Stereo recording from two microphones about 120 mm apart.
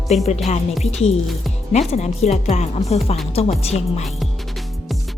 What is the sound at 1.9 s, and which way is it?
A woman's voice, 70° left (ahead or behind).